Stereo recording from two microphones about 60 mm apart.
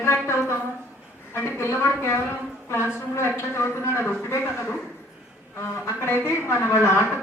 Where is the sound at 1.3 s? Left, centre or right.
Left.